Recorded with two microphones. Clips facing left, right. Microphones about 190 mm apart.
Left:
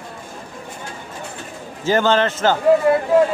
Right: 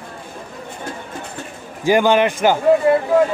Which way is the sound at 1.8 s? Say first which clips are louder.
Right 3 dB; 15° right (ahead or behind).